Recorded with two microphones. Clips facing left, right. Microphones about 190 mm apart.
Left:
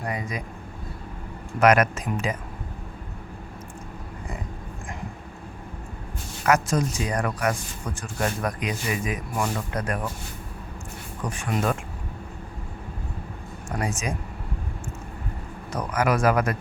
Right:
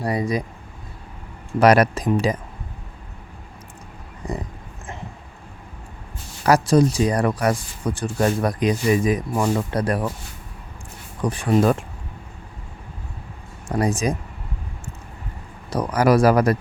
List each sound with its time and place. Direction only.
0.0 s speech: 35° right (ahead or behind)
1.5 s speech: 35° right (ahead or behind)
6.4 s speech: 35° right (ahead or behind)
11.2 s speech: 35° right (ahead or behind)
13.7 s speech: 35° right (ahead or behind)
15.7 s speech: 35° right (ahead or behind)